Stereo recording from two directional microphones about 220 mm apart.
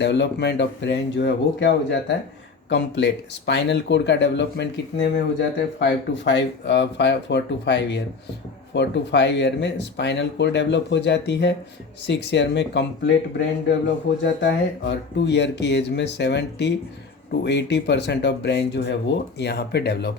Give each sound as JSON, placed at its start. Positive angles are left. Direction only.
{"t": 0.0, "sound": "speech", "side_deg": 50}